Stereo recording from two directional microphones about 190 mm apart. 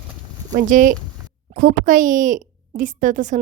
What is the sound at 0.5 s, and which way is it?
A woman's voice, 45° right (ahead or behind).